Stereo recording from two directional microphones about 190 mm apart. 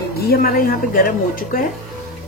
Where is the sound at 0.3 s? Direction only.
50° left (ahead or behind).